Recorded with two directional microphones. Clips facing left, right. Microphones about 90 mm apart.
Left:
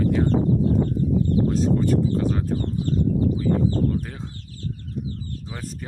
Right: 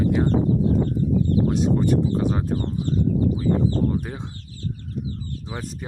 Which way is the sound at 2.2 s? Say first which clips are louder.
Right 1 dB; 20° right (ahead or behind).